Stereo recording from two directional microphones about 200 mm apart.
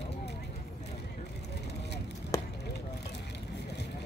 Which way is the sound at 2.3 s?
15° left (ahead or behind).